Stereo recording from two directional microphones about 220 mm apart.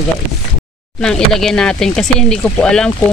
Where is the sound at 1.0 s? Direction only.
5° left (ahead or behind).